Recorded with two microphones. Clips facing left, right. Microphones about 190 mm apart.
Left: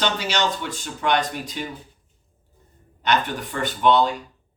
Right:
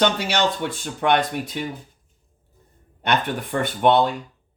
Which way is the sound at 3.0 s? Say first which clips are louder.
Even; 55° right (ahead or behind).